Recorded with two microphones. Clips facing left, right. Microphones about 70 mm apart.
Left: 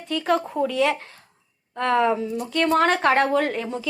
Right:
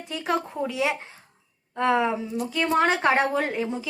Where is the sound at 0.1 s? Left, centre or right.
Centre.